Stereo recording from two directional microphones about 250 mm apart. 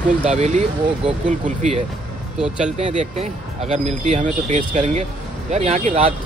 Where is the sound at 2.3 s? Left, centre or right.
Centre.